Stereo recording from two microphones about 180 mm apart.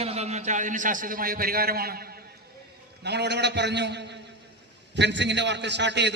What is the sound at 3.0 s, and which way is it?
A man's voice, 70° right (ahead or behind).